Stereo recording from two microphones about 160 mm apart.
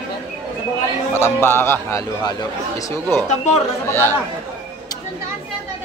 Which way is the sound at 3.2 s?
45° left (ahead or behind).